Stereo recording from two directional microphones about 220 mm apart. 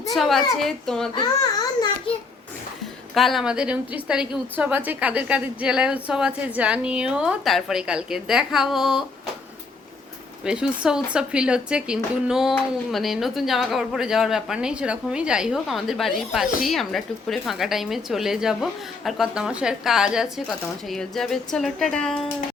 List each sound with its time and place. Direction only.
0.1 s speech: centre (ahead or behind)
1.1 s babbling: 20° left (ahead or behind)
3.2 s speech: centre (ahead or behind)
10.4 s speech: 5° right (ahead or behind)